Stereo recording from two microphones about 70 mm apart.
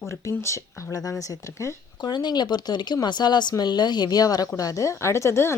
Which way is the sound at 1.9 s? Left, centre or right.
Left.